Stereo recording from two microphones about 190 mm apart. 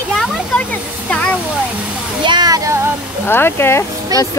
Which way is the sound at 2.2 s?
20° right (ahead or behind).